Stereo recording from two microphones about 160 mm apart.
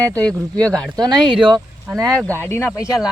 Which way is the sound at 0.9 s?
30° right (ahead or behind).